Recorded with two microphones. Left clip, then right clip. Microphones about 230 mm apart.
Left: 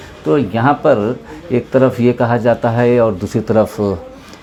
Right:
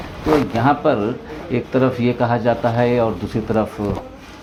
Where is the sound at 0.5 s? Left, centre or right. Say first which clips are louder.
Left 4 dB; left.